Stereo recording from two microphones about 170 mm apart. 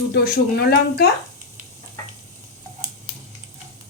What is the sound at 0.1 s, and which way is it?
Speech, 70° left (ahead or behind).